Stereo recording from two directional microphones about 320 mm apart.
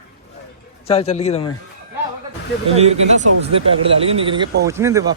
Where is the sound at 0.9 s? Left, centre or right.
Centre.